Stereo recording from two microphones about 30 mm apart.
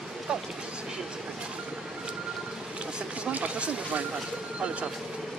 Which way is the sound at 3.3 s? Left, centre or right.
Right.